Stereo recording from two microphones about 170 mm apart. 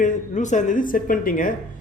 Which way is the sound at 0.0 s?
50° left (ahead or behind).